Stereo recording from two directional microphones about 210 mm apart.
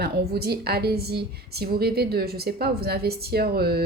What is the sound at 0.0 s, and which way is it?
A woman's voice, 50° right (ahead or behind).